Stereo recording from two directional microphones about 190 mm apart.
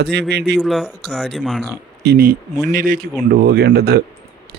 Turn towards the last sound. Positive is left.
turn(degrees=-55)  # may be behind; listen again after turning